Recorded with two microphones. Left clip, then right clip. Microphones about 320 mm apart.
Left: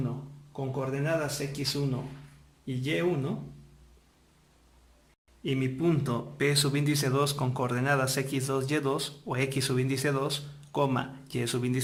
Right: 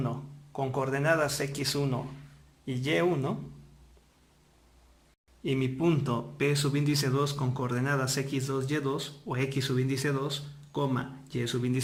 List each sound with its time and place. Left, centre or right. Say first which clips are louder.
0.6 s speech: right 3 dB; right
5.4 s speech: right 1 dB; centre